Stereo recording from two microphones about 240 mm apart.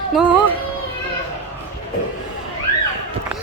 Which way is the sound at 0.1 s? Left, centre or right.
Centre.